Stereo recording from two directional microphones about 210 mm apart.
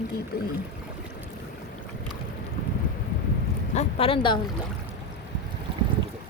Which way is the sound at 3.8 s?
25° left (ahead or behind).